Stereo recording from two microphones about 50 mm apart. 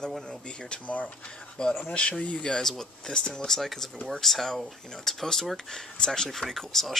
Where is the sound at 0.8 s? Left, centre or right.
Left.